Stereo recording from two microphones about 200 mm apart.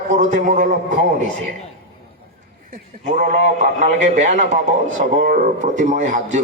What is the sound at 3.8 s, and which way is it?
A man's voice, 40° right (ahead or behind).